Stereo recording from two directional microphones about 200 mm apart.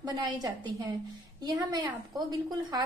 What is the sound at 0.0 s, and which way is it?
A woman's voice, 20° right (ahead or behind).